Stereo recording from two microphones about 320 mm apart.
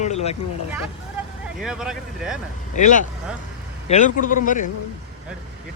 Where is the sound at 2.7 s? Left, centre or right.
Left.